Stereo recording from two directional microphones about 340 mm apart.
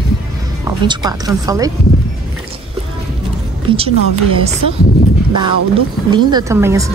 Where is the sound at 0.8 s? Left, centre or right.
Centre.